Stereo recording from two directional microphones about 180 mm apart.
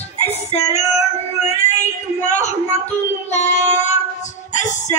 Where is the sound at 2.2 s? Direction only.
40° left (ahead or behind).